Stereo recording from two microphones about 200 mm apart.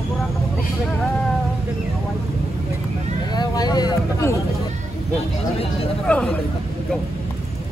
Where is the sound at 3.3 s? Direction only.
20° left (ahead or behind).